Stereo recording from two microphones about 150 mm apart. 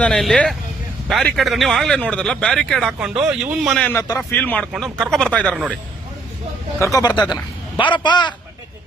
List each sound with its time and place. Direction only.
0.0 s speech: 5° left (ahead or behind)
6.7 s a man's voice: 20° left (ahead or behind)